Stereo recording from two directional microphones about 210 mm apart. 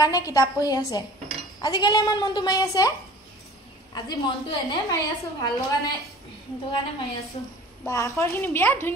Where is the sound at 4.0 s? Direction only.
20° left (ahead or behind).